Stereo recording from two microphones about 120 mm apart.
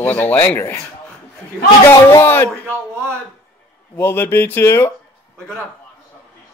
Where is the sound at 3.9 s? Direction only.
20° left (ahead or behind).